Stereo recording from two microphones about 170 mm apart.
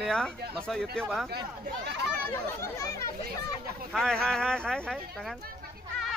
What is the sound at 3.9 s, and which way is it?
Speech, 5° left (ahead or behind).